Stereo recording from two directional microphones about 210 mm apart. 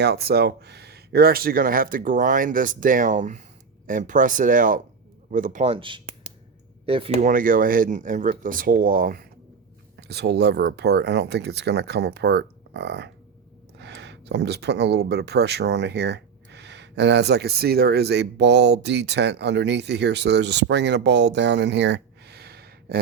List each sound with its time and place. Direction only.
0.0 s speech: 50° right (ahead or behind); by 7.3 s 25° right (ahead or behind)
7.3 s speech: 40° right (ahead or behind)